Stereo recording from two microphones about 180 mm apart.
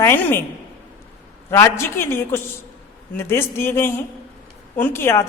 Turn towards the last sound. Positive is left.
turn(degrees=15)  # may be behind; listen again after turning